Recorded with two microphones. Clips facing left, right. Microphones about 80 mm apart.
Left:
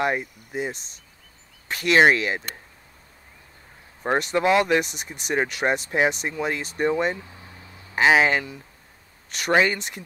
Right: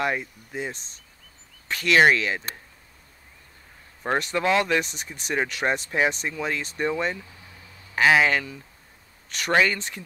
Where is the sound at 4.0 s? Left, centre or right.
Centre.